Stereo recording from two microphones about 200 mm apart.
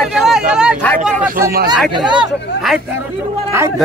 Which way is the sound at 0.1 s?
Centre (ahead or behind).